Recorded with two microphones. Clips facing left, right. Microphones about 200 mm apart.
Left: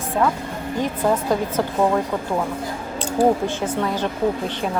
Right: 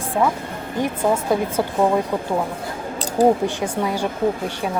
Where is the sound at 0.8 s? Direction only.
10° right (ahead or behind).